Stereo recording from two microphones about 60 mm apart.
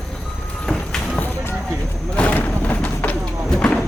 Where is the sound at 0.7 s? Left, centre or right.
Centre.